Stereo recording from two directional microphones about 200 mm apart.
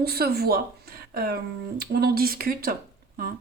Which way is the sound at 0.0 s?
50° right (ahead or behind).